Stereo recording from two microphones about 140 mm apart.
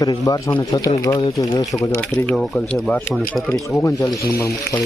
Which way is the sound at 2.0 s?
5° left (ahead or behind).